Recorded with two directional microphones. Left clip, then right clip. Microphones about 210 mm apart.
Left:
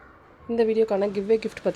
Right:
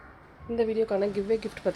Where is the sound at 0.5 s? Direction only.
30° left (ahead or behind).